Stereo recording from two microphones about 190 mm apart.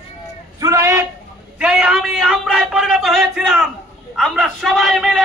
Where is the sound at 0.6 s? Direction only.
15° right (ahead or behind); by 3.7 s centre (ahead or behind).